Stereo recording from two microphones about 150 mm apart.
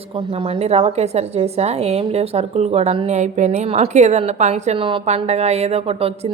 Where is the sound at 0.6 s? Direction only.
45° right (ahead or behind).